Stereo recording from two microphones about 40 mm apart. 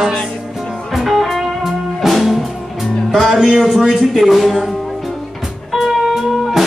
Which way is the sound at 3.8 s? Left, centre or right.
Centre.